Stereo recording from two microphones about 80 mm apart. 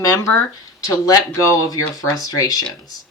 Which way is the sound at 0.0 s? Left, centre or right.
Left.